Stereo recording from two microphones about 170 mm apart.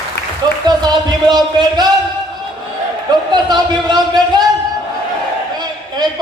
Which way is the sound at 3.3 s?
25° right (ahead or behind).